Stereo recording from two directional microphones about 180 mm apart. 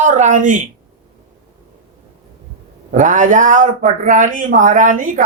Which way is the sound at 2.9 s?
45° right (ahead or behind).